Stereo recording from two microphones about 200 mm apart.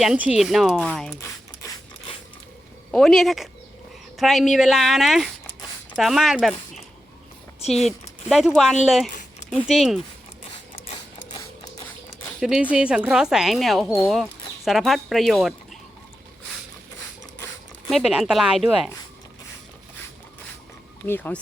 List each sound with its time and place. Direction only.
0.0 s a woman's voice: 5° right (ahead or behind)
1.2 s a sound: 15° left (ahead or behind)
2.9 s a woman's voice: centre (ahead or behind)
7.9 s a woman's voice: centre (ahead or behind)
12.4 s a woman's voice: 5° right (ahead or behind)
17.8 s a woman's voice: centre (ahead or behind)
21.1 s speech: 10° left (ahead or behind)